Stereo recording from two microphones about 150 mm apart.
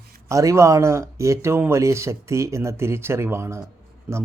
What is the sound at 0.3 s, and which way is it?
Speech, 20° right (ahead or behind).